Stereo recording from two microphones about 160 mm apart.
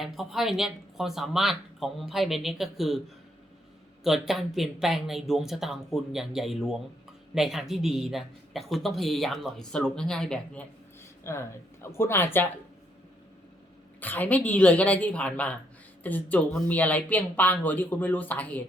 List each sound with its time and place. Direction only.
0.0 s speech: centre (ahead or behind)
4.0 s speech: centre (ahead or behind)
11.2 s speech: 15° left (ahead or behind)
14.0 s speech: 10° left (ahead or behind)